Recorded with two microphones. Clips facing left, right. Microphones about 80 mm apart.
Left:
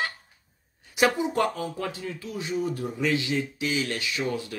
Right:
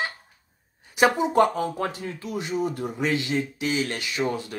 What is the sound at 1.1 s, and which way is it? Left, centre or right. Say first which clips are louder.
Speech: right 5 dB; right.